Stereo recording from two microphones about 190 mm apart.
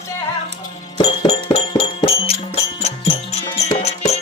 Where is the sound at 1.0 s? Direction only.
35° left (ahead or behind).